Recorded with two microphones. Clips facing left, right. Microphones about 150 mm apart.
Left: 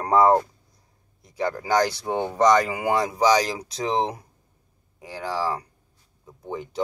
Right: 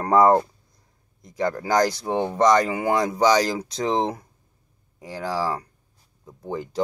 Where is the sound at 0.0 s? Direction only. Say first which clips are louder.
Right 1 dB; 5° left (ahead or behind).